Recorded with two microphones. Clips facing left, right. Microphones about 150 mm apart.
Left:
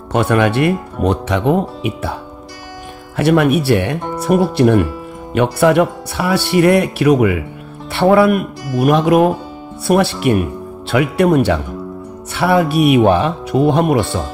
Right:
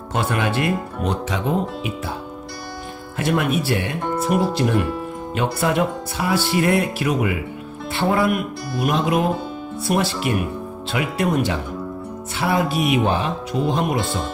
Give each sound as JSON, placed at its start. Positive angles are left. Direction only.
{"t": 0.1, "sound": "speech", "side_deg": 65}
{"t": 3.2, "sound": "speech", "side_deg": 65}